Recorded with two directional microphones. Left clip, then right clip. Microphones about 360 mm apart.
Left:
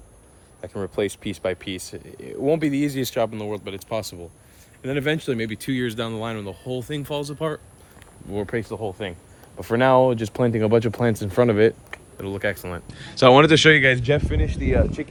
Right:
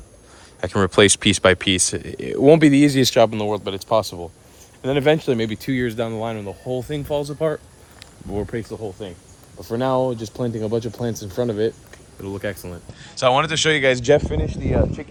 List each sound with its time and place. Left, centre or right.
0.6 s speech: right; by 8.6 s centre
8.8 s speech: left
12.2 s speech: centre